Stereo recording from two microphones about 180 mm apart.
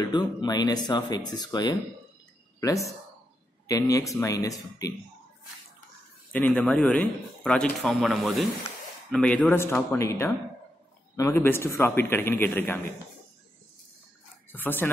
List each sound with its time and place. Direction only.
0.0 s speech: 25° left (ahead or behind)
3.6 s speech: 20° left (ahead or behind)
6.3 s a man's voice: 5° left (ahead or behind)
14.5 s speech: 10° left (ahead or behind)